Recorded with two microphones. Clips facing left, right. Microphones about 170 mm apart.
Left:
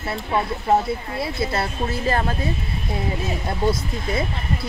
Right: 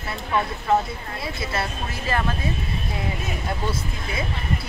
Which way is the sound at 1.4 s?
35° left (ahead or behind).